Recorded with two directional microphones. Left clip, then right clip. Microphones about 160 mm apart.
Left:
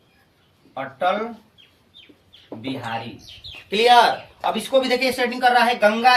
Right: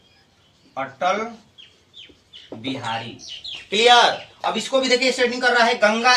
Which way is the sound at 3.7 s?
30° left (ahead or behind).